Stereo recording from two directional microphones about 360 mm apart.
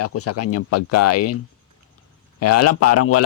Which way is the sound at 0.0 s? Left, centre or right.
Left.